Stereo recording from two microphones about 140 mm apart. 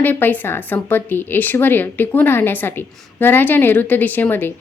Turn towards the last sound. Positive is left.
turn(degrees=15)  # may be behind; listen again after turning